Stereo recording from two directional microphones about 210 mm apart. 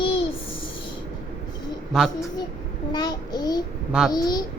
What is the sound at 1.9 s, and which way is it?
Speech, centre (ahead or behind).